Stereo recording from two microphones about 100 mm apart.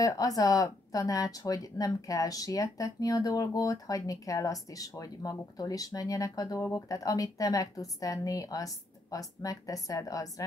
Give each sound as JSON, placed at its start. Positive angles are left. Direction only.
{"t": 0.0, "sound": "speech", "side_deg": 35}